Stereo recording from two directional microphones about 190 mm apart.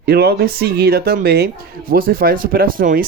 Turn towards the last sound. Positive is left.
turn(degrees=-45)  # may be behind; listen again after turning